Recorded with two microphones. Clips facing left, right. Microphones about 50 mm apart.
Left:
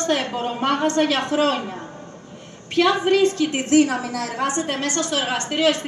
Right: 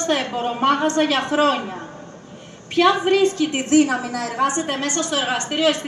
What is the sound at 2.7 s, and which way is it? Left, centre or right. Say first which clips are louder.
A woman's voice: right 1 dB; right.